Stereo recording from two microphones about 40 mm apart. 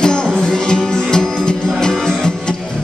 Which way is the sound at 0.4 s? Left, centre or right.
Centre.